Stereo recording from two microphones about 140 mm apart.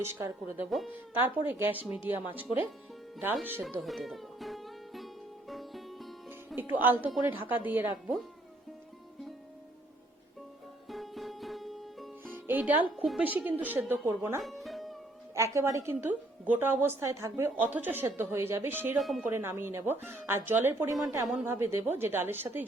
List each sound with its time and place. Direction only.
0.0 s a woman's voice: 20° right (ahead or behind)
3.6 s music: centre (ahead or behind)
6.6 s a woman's voice: 15° right (ahead or behind)
10.8 s music: centre (ahead or behind)
12.2 s music: 15° right (ahead or behind)
13.1 s a woman's voice: 10° right (ahead or behind)
14.4 s music: centre (ahead or behind)
15.4 s a woman's voice: 20° right (ahead or behind)
18.9 s speech: centre (ahead or behind)
19.2 s a woman's voice: 15° right (ahead or behind)